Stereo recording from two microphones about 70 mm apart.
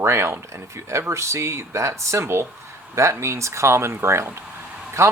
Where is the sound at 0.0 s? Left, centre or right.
Right.